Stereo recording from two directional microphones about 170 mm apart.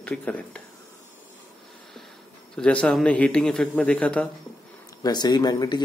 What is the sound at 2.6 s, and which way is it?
Speech, 5° left (ahead or behind).